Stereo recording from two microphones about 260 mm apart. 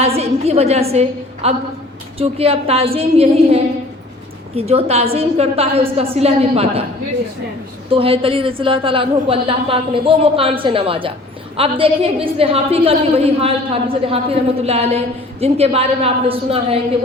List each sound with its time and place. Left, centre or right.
0.2 s a woman's voice: right
7.9 s a woman's voice: right